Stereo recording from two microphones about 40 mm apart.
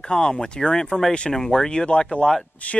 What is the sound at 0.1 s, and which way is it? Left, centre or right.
Speech, centre.